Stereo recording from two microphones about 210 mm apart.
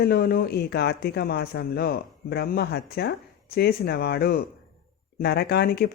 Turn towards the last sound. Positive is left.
turn(degrees=50)  # may be behind; listen again after turning